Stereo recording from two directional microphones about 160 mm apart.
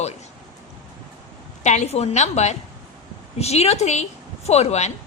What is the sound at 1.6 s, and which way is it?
A woman's voice, 45° left (ahead or behind).